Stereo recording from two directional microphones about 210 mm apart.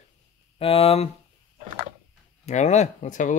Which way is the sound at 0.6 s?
25° left (ahead or behind).